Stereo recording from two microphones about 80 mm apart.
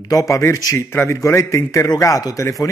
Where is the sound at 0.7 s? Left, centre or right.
Left.